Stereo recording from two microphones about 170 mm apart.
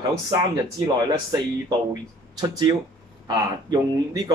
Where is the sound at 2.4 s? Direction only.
25° right (ahead or behind).